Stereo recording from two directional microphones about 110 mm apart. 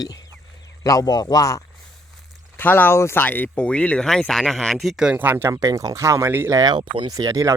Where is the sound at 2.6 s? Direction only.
15° left (ahead or behind); by 5.1 s 5° right (ahead or behind).